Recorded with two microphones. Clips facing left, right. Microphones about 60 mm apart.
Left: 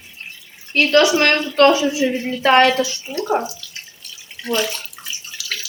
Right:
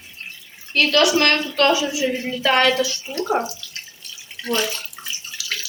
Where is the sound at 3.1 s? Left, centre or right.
Centre.